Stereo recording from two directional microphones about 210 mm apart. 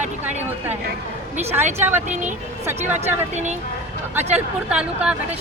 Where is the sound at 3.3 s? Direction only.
35° right (ahead or behind).